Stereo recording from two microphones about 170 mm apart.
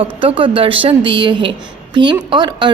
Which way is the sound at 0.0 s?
30° right (ahead or behind).